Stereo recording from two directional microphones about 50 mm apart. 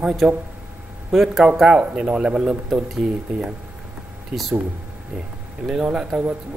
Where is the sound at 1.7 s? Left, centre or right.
Centre.